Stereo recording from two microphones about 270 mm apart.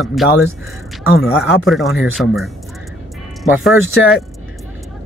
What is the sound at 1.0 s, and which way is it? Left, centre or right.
Speech, left.